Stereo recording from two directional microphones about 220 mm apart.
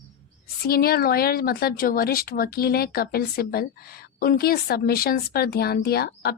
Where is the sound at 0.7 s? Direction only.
45° left (ahead or behind).